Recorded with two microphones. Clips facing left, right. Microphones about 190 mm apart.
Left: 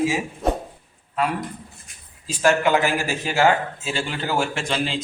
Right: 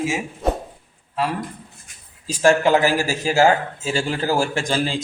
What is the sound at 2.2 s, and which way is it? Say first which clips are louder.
Speech: right 3 dB; 40° right (ahead or behind).